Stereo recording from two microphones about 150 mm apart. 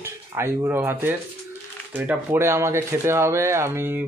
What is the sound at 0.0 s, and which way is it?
Speech, 15° right (ahead or behind).